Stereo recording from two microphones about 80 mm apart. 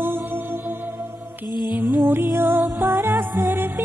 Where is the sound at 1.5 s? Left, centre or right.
Left.